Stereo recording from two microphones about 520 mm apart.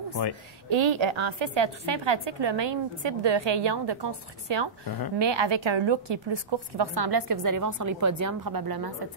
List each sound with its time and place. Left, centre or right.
0.7 s a woman's voice: right
4.8 s speech: left
5.2 s a woman's voice: right